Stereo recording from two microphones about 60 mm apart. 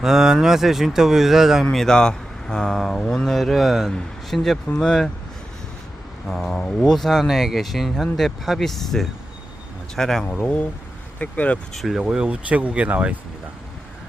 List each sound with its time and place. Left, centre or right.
0.0 s speech: centre
1.7 s speech: centre
6.2 s speech: centre
11.2 s speech: left
11.7 s speech: centre
11.9 s speech: centre